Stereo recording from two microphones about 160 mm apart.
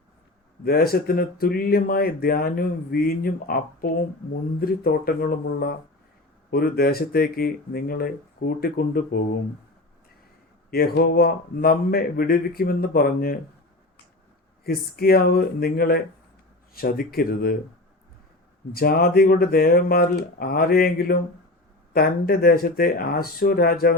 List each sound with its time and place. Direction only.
0.6 s speech: 70° left (ahead or behind)
10.7 s speech: 75° left (ahead or behind)
14.6 s speech: 70° left (ahead or behind)
18.7 s speech: 75° left (ahead or behind)